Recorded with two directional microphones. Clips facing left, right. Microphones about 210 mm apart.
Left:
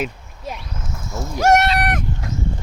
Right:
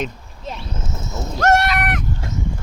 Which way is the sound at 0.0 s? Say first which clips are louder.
Left 1 dB; 5° left (ahead or behind).